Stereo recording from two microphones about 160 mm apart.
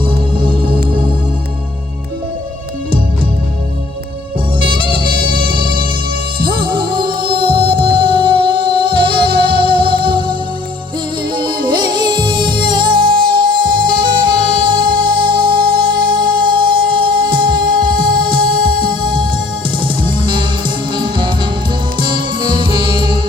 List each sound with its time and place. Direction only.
0.3 s music: 30° right (ahead or behind)
4.6 s music: 30° right (ahead or behind)
5.0 s music: 65° right (ahead or behind)
5.5 s music: 30° right (ahead or behind)